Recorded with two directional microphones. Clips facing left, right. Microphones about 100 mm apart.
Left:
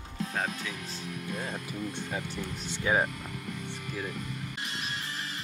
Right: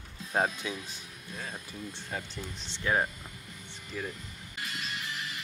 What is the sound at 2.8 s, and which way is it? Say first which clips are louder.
Speech: left 2 dB; 10° left (ahead or behind).